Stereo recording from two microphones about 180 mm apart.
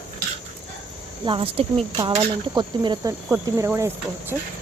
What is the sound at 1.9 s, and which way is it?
Cricket, 25° right (ahead or behind).